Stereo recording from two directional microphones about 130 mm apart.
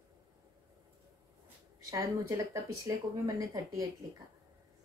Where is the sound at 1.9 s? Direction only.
25° right (ahead or behind).